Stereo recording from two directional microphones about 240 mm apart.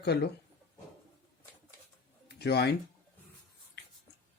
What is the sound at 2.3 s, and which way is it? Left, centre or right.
Speech, left.